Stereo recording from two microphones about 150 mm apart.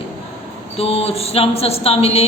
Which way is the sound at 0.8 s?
45° left (ahead or behind).